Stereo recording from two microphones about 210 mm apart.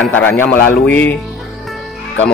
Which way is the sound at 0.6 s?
45° left (ahead or behind).